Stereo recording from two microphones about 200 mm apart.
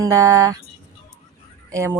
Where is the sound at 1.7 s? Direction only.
15° right (ahead or behind).